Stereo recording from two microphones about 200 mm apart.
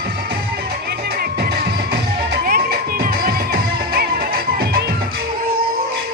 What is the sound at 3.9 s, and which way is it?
Music, 50° right (ahead or behind).